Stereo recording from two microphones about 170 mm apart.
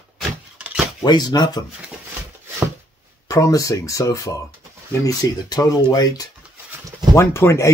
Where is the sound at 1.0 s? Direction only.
25° left (ahead or behind).